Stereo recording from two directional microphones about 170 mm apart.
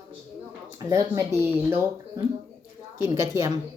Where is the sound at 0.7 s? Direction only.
20° right (ahead or behind).